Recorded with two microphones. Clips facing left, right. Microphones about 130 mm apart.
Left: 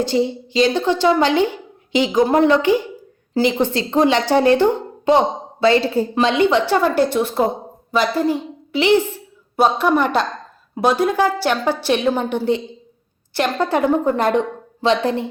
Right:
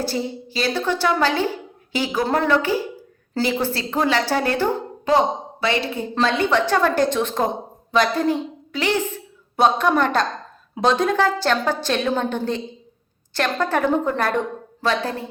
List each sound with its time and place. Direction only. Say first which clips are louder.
0.0 s a woman's voice: left 6 dB; 20° left (ahead or behind)
6.1 s a woman's voice: left 2 dB; 15° left (ahead or behind)